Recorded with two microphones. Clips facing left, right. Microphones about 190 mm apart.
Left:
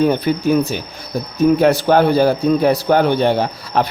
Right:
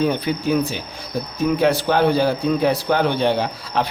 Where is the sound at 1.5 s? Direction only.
45° left (ahead or behind).